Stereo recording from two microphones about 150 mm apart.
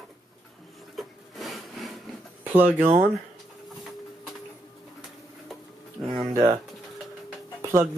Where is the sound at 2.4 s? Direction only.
10° right (ahead or behind).